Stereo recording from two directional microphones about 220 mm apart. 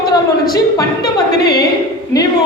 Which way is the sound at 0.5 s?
15° left (ahead or behind).